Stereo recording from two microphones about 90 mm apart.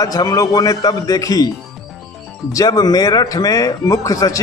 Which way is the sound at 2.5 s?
45° left (ahead or behind).